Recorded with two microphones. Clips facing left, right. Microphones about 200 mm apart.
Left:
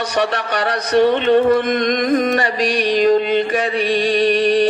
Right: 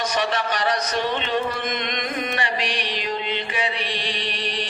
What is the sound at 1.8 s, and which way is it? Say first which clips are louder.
Music: left 12 dB; 45° left (ahead or behind).